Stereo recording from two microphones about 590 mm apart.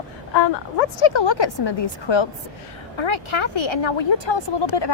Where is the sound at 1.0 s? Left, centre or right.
Left.